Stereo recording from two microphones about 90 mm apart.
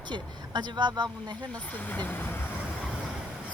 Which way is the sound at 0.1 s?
55° right (ahead or behind).